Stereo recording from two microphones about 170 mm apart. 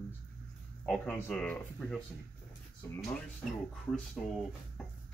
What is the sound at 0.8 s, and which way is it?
Speech, 5° left (ahead or behind).